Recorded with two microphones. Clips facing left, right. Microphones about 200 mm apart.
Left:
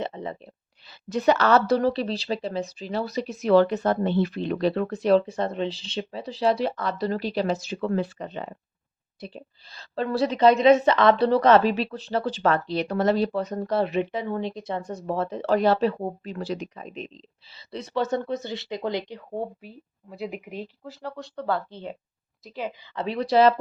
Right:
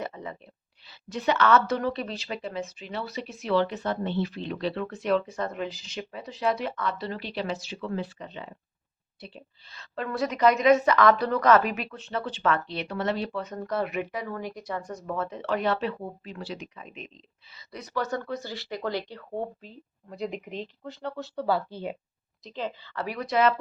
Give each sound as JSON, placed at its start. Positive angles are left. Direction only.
{"t": 0.0, "sound": "a sound", "side_deg": 30}
{"t": 0.9, "sound": "a woman's voice", "side_deg": 45}
{"t": 22.4, "sound": "speech", "side_deg": 10}